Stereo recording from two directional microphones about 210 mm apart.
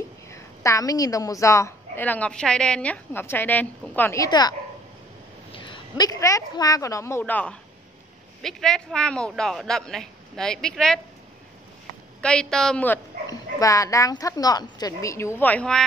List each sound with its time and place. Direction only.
0.3 s a woman's voice: 15° left (ahead or behind)
12.2 s a woman's voice: 5° left (ahead or behind)